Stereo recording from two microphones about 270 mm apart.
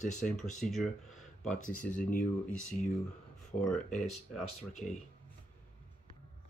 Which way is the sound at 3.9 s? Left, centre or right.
Left.